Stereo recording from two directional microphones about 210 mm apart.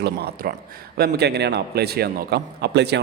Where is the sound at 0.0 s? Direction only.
50° right (ahead or behind).